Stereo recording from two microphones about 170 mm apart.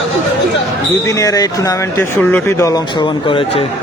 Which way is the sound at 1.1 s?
20° left (ahead or behind).